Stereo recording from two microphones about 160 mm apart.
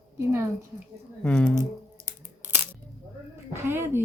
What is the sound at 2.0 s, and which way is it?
Scissors, 10° right (ahead or behind).